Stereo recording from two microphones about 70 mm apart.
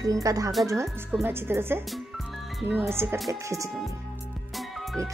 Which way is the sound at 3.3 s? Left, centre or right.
Right.